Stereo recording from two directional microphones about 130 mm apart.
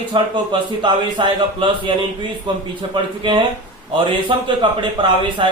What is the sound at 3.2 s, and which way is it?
A man's voice, 40° right (ahead or behind).